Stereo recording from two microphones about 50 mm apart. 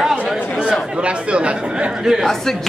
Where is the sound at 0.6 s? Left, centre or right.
Right.